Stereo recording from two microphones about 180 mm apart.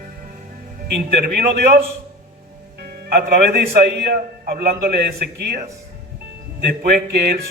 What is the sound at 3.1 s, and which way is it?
A man's voice, 60° right (ahead or behind).